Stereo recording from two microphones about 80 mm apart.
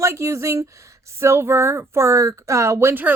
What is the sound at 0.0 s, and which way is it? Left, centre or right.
Speech, right.